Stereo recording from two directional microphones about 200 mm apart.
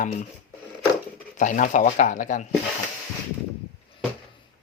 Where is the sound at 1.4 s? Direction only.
40° left (ahead or behind).